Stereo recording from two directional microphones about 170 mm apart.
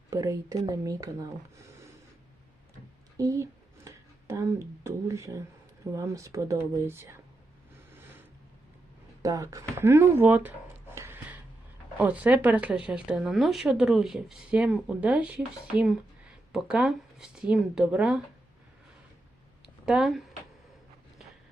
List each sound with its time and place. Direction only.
0.1 s speech: 20° right (ahead or behind)
3.2 s speech: 20° right (ahead or behind)
9.2 s speech: 20° right (ahead or behind)
10.9 s a sound: 15° right (ahead or behind)
11.9 s speech: 10° right (ahead or behind)
19.6 s a sound: 5° right (ahead or behind)